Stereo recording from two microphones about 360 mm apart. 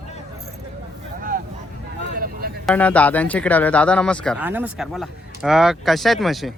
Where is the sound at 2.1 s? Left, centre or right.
Right.